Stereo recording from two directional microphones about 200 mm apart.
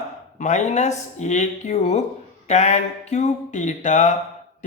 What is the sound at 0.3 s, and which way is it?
Speech, 35° left (ahead or behind).